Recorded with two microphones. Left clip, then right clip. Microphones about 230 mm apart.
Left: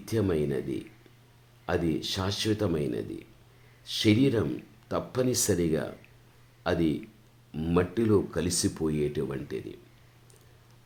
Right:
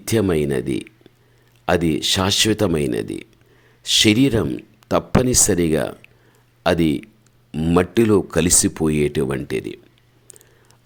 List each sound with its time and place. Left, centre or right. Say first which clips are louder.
0.0 s speech: right 9 dB; right